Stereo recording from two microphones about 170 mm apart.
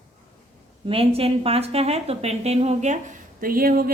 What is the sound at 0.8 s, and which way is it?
A woman's voice, 35° right (ahead or behind).